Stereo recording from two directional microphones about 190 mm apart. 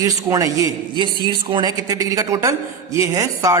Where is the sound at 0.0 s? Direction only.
15° right (ahead or behind).